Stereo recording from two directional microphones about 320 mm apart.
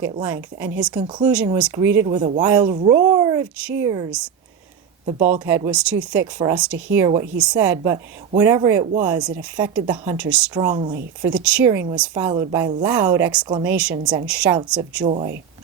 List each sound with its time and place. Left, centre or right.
0.0 s speech: centre
5.5 s speech: centre
15.0 s speech: centre